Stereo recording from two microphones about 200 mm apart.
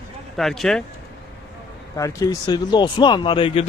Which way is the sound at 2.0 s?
15° left (ahead or behind).